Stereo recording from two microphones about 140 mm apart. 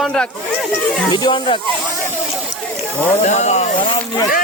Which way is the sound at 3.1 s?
55° left (ahead or behind).